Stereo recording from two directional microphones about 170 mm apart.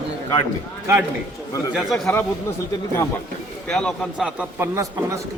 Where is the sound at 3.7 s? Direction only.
5° left (ahead or behind).